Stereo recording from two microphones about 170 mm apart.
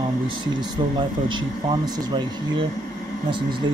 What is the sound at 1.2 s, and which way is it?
Speech, 30° right (ahead or behind).